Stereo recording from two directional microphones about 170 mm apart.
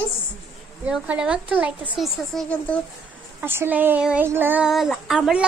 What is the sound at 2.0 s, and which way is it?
Child singing, 5° left (ahead or behind).